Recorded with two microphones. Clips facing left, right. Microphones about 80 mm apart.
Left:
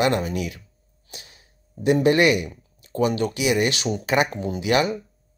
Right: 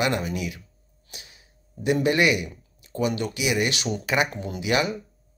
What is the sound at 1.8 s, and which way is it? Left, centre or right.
Speech, left.